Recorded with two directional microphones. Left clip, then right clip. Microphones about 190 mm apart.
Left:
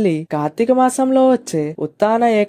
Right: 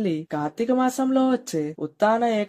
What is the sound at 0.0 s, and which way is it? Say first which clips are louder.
Speech: left 8 dB; 40° left (ahead or behind).